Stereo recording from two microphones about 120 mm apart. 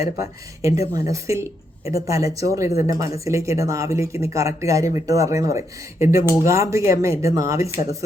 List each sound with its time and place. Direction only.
0.2 s speech: 25° right (ahead or behind)